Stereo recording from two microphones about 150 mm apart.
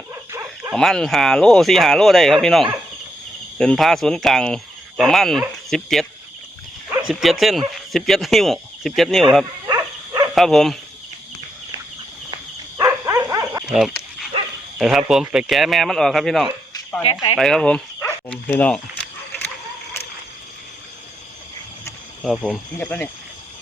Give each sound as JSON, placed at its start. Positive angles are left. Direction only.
{"t": 0.1, "sound": "livestock", "side_deg": -20}
{"t": 0.7, "sound": "speech", "side_deg": 0}
{"t": 7.1, "sound": "speech", "side_deg": 0}
{"t": 9.6, "sound": "dog", "side_deg": -25}
{"t": 10.3, "sound": "speech", "side_deg": 0}
{"t": 12.7, "sound": "dog", "side_deg": -20}
{"t": 13.7, "sound": "dog", "side_deg": 0}
{"t": 14.8, "sound": "speech", "side_deg": -5}
{"t": 17.0, "sound": "speech", "side_deg": 35}
{"t": 17.3, "sound": "speech", "side_deg": 5}
{"t": 22.2, "sound": "speech", "side_deg": 5}